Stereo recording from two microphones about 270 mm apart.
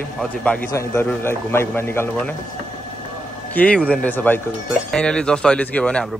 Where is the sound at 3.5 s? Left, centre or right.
Centre.